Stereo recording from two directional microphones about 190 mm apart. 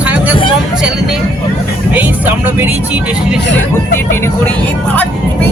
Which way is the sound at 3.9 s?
15° left (ahead or behind).